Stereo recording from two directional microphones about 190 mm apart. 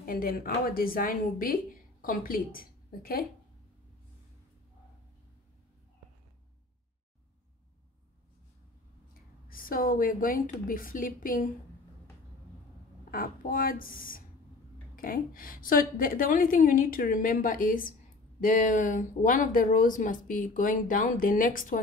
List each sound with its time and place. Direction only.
0.0 s a woman's voice: 50° left (ahead or behind)
9.5 s speech: 50° left (ahead or behind)
13.1 s speech: 45° left (ahead or behind)